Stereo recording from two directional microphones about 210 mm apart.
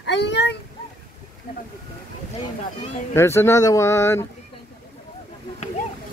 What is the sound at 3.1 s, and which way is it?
Speech, 10° left (ahead or behind).